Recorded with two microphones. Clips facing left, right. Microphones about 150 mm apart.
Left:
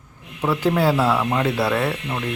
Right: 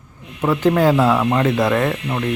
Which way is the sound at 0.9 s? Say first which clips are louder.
Right 4 dB; 15° right (ahead or behind).